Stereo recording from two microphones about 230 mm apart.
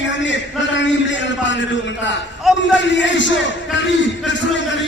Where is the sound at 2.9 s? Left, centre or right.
Left.